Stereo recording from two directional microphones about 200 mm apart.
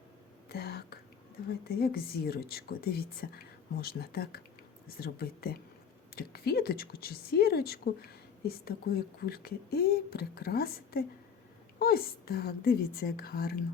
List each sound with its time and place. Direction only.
0.4 s whispering: 50° left (ahead or behind)
1.6 s speech: 50° left (ahead or behind)